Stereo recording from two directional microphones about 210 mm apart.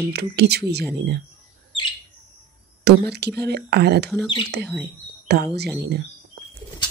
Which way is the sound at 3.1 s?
50° right (ahead or behind).